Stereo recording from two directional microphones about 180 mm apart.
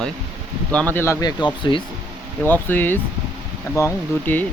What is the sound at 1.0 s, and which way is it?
Speech, 20° left (ahead or behind).